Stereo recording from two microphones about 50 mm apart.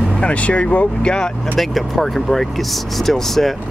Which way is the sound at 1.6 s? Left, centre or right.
Centre.